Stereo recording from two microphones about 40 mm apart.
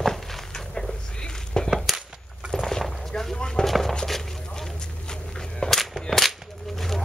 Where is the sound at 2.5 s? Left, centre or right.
Centre.